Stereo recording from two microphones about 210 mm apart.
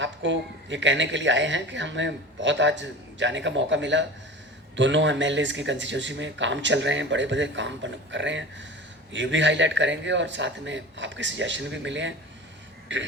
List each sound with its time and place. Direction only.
0.0 s speech: 60° right (ahead or behind)